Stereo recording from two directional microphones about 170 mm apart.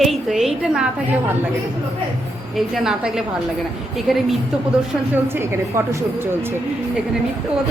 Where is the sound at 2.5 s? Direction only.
Centre (ahead or behind).